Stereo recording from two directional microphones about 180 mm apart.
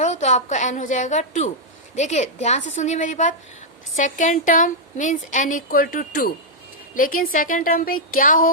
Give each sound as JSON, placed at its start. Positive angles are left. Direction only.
{"t": 0.0, "sound": "a woman's voice", "side_deg": 40}